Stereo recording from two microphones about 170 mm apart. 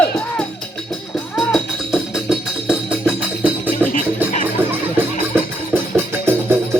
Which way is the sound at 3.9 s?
50° left (ahead or behind).